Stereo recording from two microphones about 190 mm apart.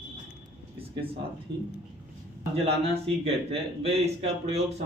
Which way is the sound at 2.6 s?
30° right (ahead or behind).